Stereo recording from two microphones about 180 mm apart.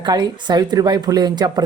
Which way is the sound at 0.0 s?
25° right (ahead or behind).